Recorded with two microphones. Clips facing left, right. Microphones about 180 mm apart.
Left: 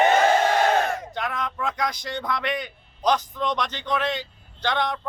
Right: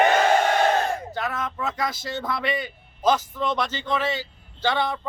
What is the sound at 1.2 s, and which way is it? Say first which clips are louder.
Speech: left 2 dB; 5° right (ahead or behind).